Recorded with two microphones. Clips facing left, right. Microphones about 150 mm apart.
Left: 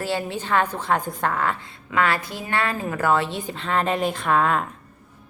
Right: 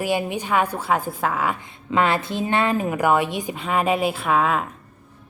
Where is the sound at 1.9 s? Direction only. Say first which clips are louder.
Right 2 dB; 20° right (ahead or behind); by 4.7 s 5° right (ahead or behind).